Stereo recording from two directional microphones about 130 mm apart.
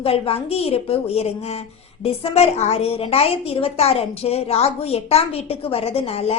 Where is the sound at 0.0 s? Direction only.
50° left (ahead or behind).